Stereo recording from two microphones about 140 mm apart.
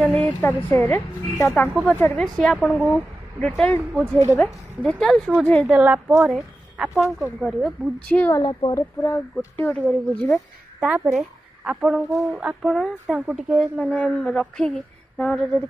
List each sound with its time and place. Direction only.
0.0 s a sound: 5° left (ahead or behind)
0.4 s a woman's voice: 15° left (ahead or behind)
3.9 s a woman's voice: 5° right (ahead or behind)
8.1 s a woman's voice: 10° left (ahead or behind)
8.4 s speech: 30° left (ahead or behind)
8.7 s a woman's voice: 20° left (ahead or behind)
10.3 s a woman's voice: 5° right (ahead or behind)
13.7 s a woman's voice: 5° left (ahead or behind)